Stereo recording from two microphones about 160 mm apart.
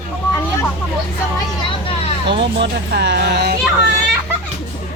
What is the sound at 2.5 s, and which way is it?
Speech, 90° right.